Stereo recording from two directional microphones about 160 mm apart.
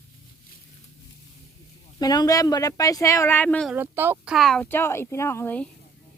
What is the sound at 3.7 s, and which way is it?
Speech, 10° right (ahead or behind).